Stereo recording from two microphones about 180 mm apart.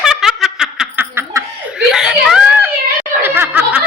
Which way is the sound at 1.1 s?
15° right (ahead or behind).